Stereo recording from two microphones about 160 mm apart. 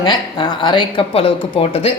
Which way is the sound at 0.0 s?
25° left (ahead or behind).